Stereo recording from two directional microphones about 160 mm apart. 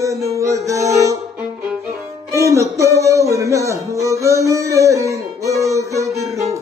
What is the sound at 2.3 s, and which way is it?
Music, 20° right (ahead or behind).